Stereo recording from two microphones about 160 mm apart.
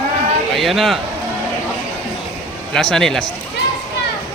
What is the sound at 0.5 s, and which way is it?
Speech, centre (ahead or behind).